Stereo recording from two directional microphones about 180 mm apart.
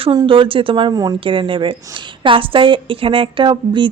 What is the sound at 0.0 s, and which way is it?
A woman's voice, 25° right (ahead or behind).